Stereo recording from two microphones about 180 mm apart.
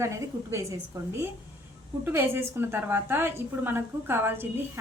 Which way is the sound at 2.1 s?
10° right (ahead or behind).